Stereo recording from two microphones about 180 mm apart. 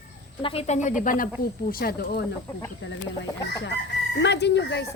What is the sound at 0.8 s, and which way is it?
Speech, 45° left (ahead or behind).